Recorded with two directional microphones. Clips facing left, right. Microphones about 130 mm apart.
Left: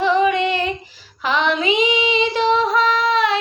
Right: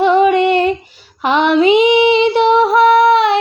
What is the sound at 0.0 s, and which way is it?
Child singing, 60° right (ahead or behind).